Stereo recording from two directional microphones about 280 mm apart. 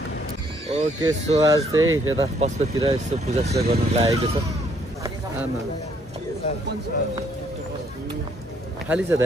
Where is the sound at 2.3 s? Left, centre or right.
Right.